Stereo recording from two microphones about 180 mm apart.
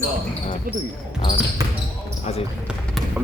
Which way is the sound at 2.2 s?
35° left (ahead or behind).